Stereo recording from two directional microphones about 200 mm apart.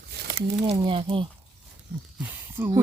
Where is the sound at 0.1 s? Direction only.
55° right (ahead or behind).